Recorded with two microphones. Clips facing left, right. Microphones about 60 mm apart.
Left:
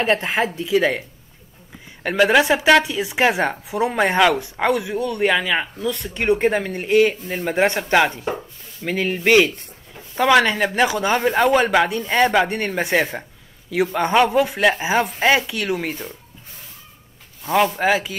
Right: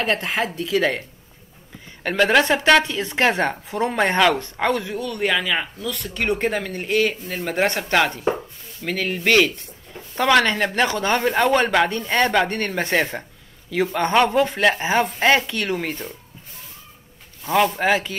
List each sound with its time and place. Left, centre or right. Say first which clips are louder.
0.0 s speech: left 3 dB; left
2.0 s speech: left 2 dB; centre
4.9 s speech: left 3 dB; left
5.8 s speech: left 2 dB; left; by 16.1 s centre
17.4 s speech: left 1 dB; centre